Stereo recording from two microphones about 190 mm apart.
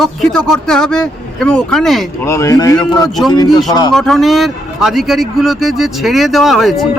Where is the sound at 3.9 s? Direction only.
Centre (ahead or behind).